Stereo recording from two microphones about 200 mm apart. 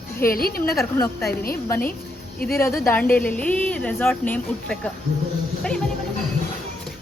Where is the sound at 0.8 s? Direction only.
15° left (ahead or behind).